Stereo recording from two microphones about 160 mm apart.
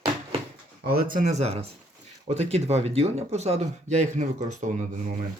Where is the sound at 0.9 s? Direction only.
60° right (ahead or behind).